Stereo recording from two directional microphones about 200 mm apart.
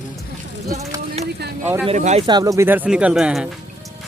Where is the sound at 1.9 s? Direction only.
35° right (ahead or behind).